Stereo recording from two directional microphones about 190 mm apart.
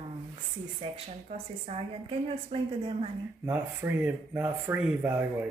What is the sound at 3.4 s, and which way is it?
Speech, 10° right (ahead or behind).